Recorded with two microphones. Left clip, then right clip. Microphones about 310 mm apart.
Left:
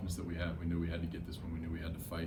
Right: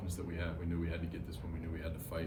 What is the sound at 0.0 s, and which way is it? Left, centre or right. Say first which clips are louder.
Speech: left 1 dB; centre.